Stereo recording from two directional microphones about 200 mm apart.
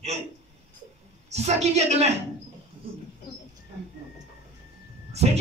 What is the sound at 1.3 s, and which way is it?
Speech, 35° right (ahead or behind).